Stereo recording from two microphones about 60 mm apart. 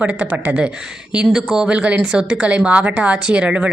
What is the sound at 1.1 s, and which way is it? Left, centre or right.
A woman's voice, centre.